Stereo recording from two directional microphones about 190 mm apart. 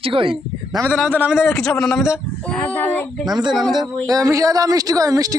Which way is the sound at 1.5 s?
5° left (ahead or behind).